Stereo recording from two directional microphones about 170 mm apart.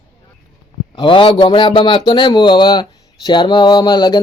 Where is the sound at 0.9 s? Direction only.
30° left (ahead or behind).